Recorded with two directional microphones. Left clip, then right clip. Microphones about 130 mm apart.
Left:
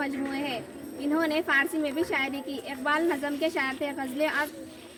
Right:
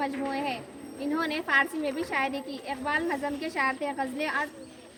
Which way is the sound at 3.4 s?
35° right (ahead or behind).